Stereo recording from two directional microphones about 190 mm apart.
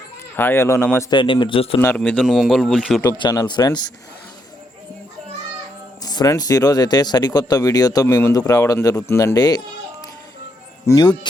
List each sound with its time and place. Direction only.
0.3 s speech: 10° left (ahead or behind)
1.1 s speech: 25° left (ahead or behind)
1.8 s speech: 10° left (ahead or behind)
3.1 s speech: 20° left (ahead or behind)
6.0 s speech: 20° left (ahead or behind)
10.8 s speech: 20° left (ahead or behind)